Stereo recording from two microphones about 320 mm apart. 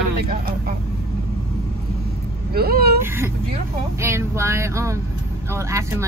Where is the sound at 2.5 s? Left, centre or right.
Right.